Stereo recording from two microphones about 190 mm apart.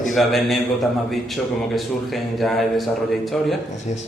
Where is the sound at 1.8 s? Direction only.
Centre (ahead or behind).